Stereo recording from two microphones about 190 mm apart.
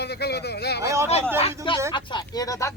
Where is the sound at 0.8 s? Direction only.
15° right (ahead or behind).